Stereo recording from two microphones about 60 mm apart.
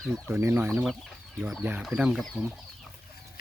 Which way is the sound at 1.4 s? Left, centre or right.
Right.